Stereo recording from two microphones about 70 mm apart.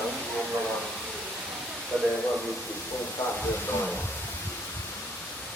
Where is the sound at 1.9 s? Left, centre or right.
Centre.